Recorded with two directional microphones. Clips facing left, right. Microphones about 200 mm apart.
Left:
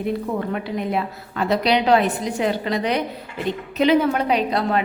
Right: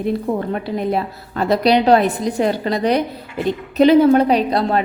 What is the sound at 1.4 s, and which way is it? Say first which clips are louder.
A woman's voice: right 4 dB; 40° right (ahead or behind).